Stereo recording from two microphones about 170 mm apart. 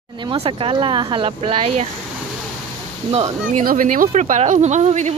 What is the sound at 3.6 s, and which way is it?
Speech, 55° right (ahead or behind).